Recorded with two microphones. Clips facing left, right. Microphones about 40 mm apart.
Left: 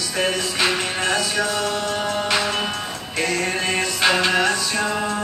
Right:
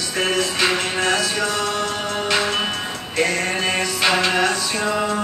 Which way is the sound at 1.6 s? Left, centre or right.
Centre.